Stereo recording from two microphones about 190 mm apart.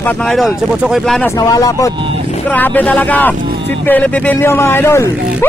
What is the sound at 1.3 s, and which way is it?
Speech, 20° left (ahead or behind).